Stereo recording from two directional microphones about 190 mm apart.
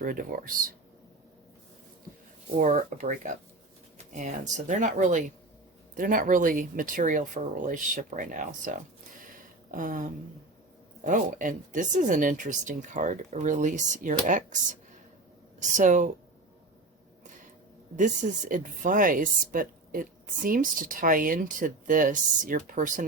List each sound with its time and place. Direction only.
0.0 s speech: 45° right (ahead or behind)
2.6 s speech: 40° right (ahead or behind)
17.9 s speech: 45° right (ahead or behind)